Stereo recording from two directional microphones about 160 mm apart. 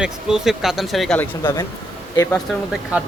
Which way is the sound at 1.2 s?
20° left (ahead or behind).